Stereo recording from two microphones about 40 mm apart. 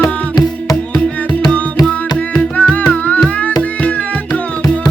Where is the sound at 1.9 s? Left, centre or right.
Left.